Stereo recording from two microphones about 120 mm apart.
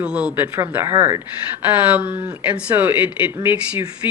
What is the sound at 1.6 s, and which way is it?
Speech, 15° right (ahead or behind).